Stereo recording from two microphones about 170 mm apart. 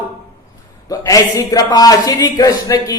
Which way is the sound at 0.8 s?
20° left (ahead or behind).